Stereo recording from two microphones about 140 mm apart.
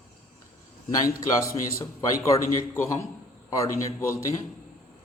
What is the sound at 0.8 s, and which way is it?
Speech, 25° left (ahead or behind).